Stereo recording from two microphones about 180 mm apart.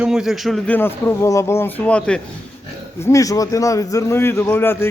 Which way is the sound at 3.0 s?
20° left (ahead or behind).